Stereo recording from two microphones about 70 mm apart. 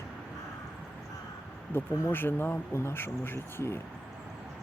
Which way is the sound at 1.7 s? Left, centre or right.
Left.